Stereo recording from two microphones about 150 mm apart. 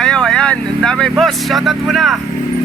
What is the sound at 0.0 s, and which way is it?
Speech, 5° left (ahead or behind).